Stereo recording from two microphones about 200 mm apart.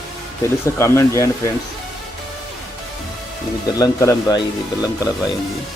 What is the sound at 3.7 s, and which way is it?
Speech, 15° left (ahead or behind).